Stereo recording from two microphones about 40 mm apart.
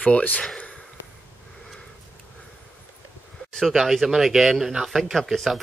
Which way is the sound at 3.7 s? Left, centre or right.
Centre.